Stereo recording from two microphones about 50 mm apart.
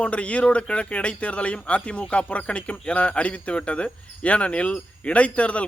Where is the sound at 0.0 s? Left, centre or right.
Left.